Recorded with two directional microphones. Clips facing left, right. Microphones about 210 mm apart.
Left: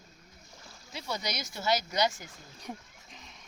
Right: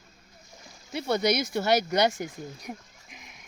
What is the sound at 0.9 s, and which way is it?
Speech, 60° right (ahead or behind).